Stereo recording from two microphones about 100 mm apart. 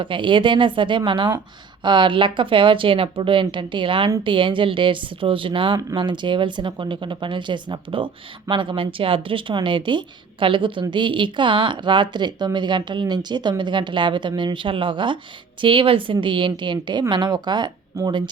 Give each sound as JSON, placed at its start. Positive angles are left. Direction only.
{"t": 0.0, "sound": "a woman's voice", "side_deg": -55}